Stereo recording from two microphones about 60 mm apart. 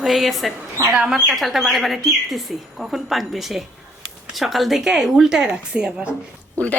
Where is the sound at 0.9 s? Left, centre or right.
Centre.